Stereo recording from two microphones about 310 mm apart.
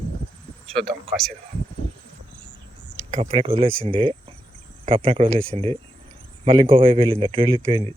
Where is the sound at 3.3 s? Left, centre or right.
Centre.